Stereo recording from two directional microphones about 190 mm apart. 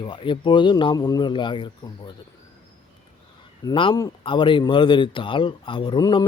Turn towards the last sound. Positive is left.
turn(degrees=25)  # may be behind; listen again after turning